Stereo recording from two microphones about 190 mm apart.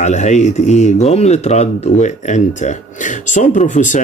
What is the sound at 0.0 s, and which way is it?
Speech, 40° left (ahead or behind).